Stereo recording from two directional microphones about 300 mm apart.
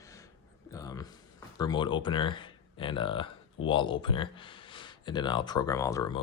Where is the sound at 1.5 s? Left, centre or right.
Centre.